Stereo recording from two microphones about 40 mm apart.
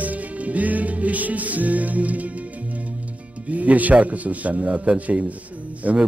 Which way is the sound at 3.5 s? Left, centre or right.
Right.